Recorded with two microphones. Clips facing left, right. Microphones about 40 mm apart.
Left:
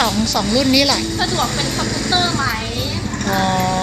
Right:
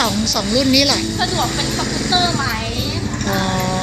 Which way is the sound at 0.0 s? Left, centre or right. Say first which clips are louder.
Left 1 dB; centre.